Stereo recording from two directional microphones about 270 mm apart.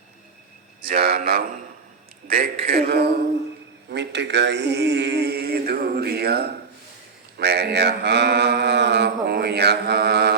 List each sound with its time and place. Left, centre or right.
0.9 s mantra: right
2.2 s a man's voice: right
2.6 s mantra: right